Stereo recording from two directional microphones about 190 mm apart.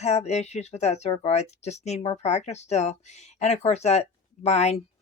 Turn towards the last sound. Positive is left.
turn(degrees=35)  # may be behind; listen again after turning